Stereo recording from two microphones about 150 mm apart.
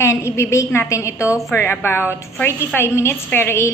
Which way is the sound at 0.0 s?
20° left (ahead or behind).